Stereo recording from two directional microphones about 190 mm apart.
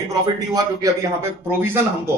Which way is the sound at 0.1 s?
20° right (ahead or behind).